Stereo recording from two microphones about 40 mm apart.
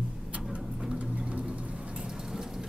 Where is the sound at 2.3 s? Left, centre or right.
Centre.